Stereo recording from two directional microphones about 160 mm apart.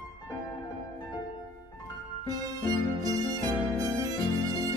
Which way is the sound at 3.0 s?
25° right (ahead or behind).